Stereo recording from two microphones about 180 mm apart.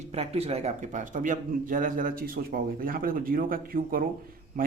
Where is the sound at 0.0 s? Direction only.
35° right (ahead or behind).